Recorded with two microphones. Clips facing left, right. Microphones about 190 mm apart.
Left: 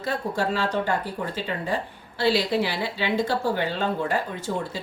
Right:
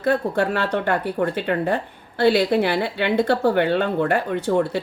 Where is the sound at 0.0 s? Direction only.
60° right (ahead or behind).